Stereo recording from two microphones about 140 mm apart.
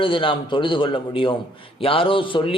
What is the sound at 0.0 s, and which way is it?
A man's voice, 40° left (ahead or behind).